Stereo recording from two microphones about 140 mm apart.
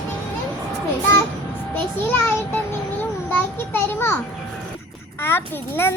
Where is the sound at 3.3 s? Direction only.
15° left (ahead or behind).